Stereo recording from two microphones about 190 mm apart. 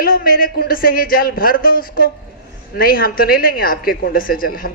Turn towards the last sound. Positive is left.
turn(degrees=50)  # may be behind; listen again after turning